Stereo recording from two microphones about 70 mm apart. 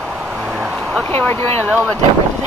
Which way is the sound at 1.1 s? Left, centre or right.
Left.